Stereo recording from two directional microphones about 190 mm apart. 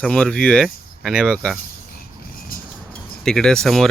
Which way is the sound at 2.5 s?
50° left (ahead or behind).